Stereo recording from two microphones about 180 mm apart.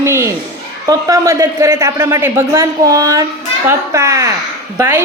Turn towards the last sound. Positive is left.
turn(degrees=-10)  # may be behind; listen again after turning